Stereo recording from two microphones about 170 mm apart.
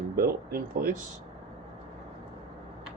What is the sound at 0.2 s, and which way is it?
Speech, 60° right (ahead or behind).